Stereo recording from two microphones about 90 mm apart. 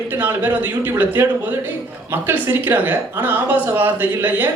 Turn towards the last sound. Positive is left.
turn(degrees=-20)  # may be behind; listen again after turning